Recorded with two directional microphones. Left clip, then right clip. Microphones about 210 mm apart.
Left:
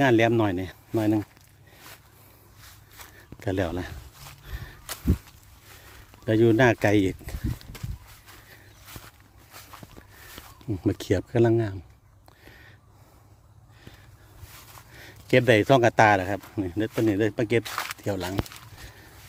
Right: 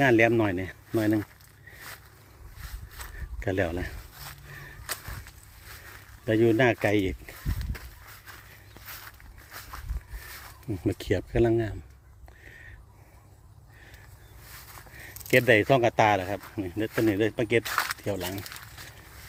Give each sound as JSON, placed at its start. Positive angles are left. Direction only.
{"t": 0.0, "sound": "speech", "side_deg": 20}
{"t": 3.0, "sound": "zipper", "side_deg": -10}
{"t": 3.4, "sound": "speech", "side_deg": 20}
{"t": 6.2, "sound": "speech", "side_deg": 30}
{"t": 10.7, "sound": "speech", "side_deg": 30}
{"t": 12.5, "sound": "a sound", "side_deg": 25}
{"t": 15.0, "sound": "speech", "side_deg": 30}
{"t": 17.6, "sound": "speech", "side_deg": -10}
{"t": 18.0, "sound": "speech", "side_deg": 30}